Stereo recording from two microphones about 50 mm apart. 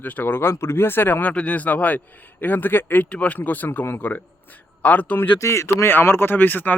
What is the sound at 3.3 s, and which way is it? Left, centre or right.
A man's voice, left.